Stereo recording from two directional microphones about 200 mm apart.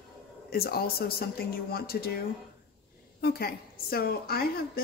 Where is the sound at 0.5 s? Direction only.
50° left (ahead or behind).